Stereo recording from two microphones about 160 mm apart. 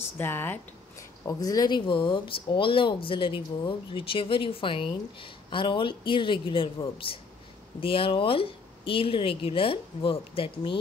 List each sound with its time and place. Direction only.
0.2 s speech: 15° left (ahead or behind); by 10.8 s 35° left (ahead or behind)